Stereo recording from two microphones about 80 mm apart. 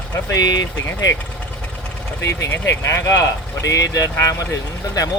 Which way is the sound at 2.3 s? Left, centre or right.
Left.